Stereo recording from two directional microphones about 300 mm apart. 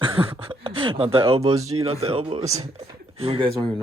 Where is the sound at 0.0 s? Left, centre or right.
Centre.